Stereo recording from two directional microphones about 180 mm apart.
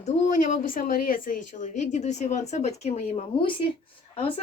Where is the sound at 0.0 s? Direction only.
45° left (ahead or behind).